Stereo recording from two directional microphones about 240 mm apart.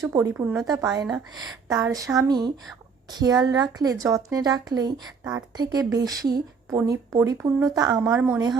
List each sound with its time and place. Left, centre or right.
0.1 s a woman's voice: centre
1.0 s speech: centre
1.6 s a woman's voice: centre